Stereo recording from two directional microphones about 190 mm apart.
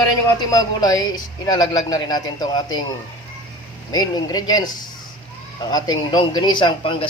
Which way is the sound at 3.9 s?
20° left (ahead or behind).